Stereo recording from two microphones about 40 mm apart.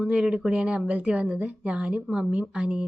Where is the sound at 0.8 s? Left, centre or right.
Right.